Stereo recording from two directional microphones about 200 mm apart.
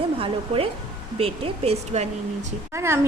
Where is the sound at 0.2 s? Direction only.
30° right (ahead or behind).